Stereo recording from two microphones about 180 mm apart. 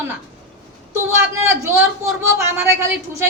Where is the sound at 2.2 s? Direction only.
15° right (ahead or behind).